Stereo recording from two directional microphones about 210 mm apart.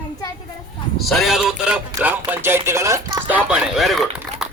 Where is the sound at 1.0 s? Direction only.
Centre (ahead or behind).